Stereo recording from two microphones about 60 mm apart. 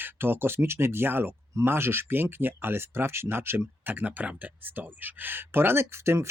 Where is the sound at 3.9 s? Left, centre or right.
Right.